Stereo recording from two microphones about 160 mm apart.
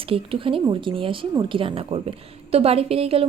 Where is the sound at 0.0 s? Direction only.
35° right (ahead or behind).